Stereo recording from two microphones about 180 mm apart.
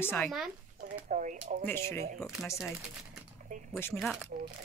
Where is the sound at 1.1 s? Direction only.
45° right (ahead or behind).